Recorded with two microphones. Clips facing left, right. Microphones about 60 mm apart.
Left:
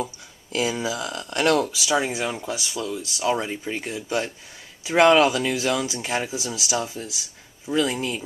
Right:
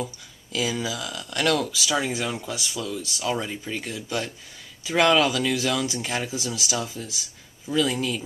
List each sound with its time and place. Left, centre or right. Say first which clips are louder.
0.0 s a sound: left 2 dB; left
0.8 s speech: left 3 dB; left
1.8 s speech: left 2 dB; centre
6.8 s speech: left 2 dB; left